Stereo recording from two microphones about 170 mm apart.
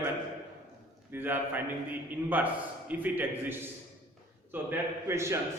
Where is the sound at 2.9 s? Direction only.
10° right (ahead or behind).